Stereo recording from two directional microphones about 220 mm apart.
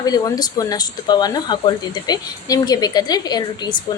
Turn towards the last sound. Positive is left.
turn(degrees=20)  # may be behind; listen again after turning